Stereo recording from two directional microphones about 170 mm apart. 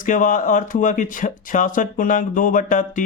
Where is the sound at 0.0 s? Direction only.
50° left (ahead or behind).